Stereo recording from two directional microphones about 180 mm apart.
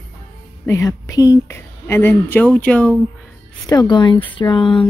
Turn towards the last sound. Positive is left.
turn(degrees=25)  # may be behind; listen again after turning